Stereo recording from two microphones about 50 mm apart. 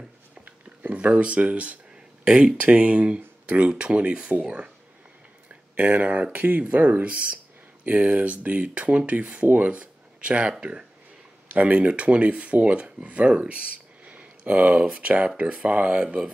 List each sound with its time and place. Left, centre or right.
0.5 s speech: right
5.8 s speech: right
9.7 s a sound: right
10.6 s speech: right